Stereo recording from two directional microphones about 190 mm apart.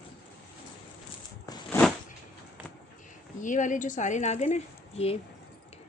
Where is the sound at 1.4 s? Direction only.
10° left (ahead or behind).